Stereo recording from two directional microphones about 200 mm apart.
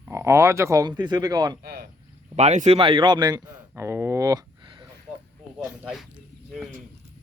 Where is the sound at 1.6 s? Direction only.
50° right (ahead or behind).